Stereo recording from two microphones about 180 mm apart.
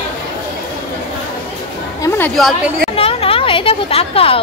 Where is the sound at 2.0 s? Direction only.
10° left (ahead or behind).